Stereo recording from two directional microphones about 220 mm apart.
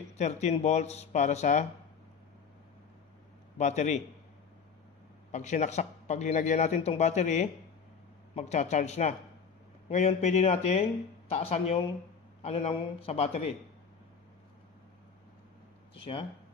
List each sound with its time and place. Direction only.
0.2 s speech: 30° left (ahead or behind)
3.5 s speech: 30° left (ahead or behind)
5.3 s speech: 30° left (ahead or behind)
15.9 s speech: 25° left (ahead or behind)